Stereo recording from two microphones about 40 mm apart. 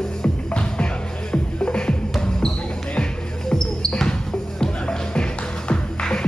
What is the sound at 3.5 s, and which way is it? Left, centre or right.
Basketball bounce, centre.